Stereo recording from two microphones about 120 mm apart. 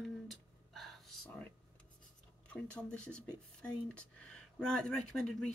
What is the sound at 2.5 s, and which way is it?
Speech, 10° left (ahead or behind).